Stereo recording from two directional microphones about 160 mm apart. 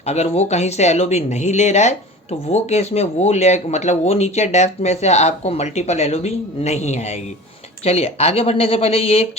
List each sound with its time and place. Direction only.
0.0 s speech: 45° left (ahead or behind)